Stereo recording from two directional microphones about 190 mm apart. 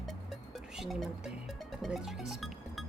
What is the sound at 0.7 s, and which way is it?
Speech, centre (ahead or behind).